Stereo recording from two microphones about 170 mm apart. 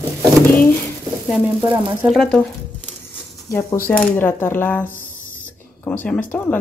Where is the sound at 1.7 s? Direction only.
10° right (ahead or behind).